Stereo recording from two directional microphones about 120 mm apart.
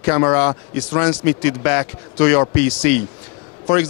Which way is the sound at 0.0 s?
25° left (ahead or behind).